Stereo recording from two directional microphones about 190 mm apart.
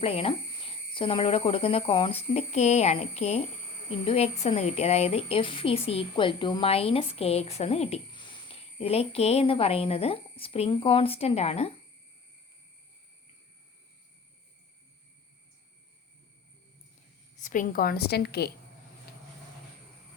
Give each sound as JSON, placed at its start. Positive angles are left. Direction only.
{"t": 0.0, "sound": "speech", "side_deg": 30}
{"t": 17.4, "sound": "a woman's voice", "side_deg": 45}